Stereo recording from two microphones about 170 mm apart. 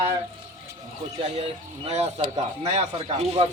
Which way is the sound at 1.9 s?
40° right (ahead or behind).